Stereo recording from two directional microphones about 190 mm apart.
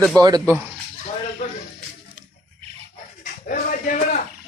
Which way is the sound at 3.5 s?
45° left (ahead or behind).